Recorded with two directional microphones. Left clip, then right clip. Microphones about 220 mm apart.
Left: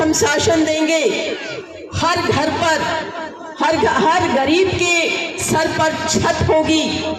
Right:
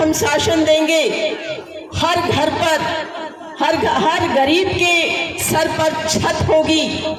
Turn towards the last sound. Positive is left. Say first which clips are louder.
# right 1 dB
turn(degrees=-40)  # may be behind; listen again after turning